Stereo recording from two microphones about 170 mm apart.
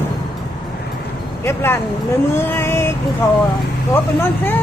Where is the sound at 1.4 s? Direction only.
15° left (ahead or behind).